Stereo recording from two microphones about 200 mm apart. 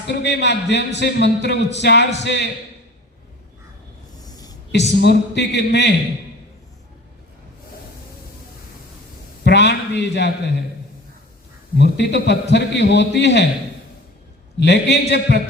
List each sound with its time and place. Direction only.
0.1 s a man's voice: 60° left (ahead or behind)
4.2 s a sound: 20° left (ahead or behind)
4.7 s a man's voice: 60° left (ahead or behind)
9.4 s a man's voice: 60° left (ahead or behind)
11.8 s a man's voice: 60° left (ahead or behind)
14.6 s a man's voice: 60° left (ahead or behind)